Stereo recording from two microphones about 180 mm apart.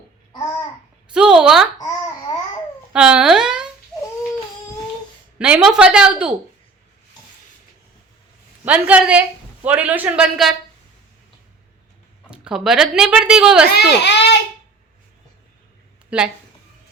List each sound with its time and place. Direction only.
1.1 s speech: 5° right (ahead or behind)
2.9 s a woman's voice: 5° right (ahead or behind)
5.4 s speech: 5° right (ahead or behind)
8.6 s a man's voice: 10° right (ahead or behind)
12.3 s speech: 5° right (ahead or behind)
13.7 s a child's voice: 70° left (ahead or behind)
16.0 s speech: 5° right (ahead or behind)